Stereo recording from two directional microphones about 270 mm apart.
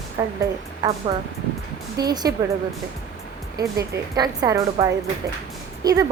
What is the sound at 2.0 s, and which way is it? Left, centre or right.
Speech, centre.